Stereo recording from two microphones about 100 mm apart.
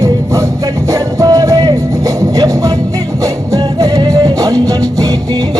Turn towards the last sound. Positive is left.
turn(degrees=-35)  # may be behind; listen again after turning